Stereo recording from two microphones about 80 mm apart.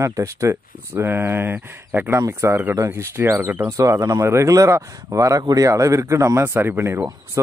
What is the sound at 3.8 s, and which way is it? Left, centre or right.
Speech, right.